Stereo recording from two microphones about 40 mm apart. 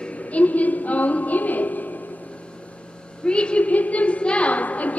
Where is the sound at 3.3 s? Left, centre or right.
Left.